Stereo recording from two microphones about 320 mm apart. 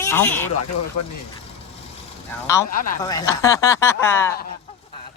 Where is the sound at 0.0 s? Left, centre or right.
Centre.